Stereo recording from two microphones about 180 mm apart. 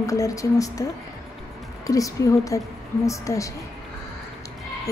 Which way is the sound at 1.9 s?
20° left (ahead or behind).